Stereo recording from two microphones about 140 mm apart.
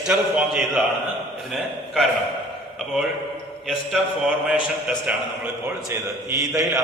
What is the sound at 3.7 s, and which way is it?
Speech, 5° right (ahead or behind).